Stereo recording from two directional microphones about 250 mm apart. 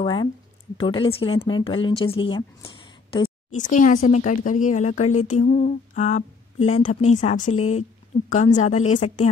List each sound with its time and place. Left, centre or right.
0.0 s a sound: centre
0.7 s a woman's voice: centre
7.5 s a woman's voice: left
8.3 s a woman's voice: left